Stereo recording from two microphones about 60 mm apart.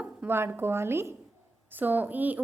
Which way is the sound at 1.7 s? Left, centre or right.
Right.